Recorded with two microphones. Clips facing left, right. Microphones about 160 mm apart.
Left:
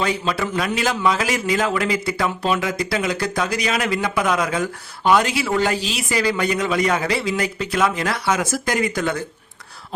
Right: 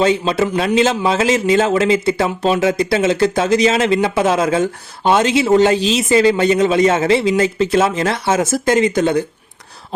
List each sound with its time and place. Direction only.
0.0 s a man's voice: 25° right (ahead or behind)